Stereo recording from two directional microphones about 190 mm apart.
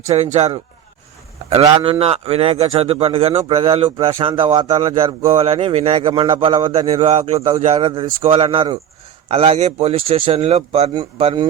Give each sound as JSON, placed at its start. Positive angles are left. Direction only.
{"t": 0.0, "sound": "a man's voice", "side_deg": -35}